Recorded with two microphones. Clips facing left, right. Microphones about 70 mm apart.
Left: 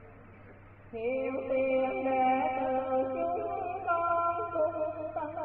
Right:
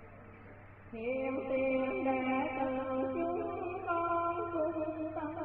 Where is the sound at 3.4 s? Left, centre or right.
Left.